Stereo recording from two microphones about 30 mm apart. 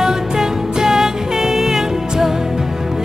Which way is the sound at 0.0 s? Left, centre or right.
Centre.